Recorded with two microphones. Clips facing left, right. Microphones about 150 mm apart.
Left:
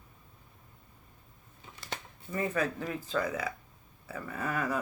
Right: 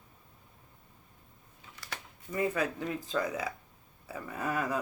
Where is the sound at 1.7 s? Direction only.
25° left (ahead or behind).